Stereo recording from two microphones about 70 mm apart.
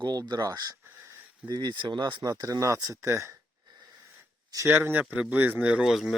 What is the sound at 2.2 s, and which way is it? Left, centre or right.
Speech, right.